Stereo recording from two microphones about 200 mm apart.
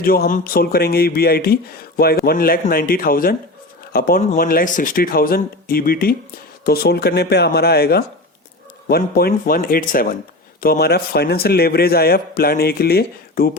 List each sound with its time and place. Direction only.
0.0 s a man's voice: 45° left (ahead or behind)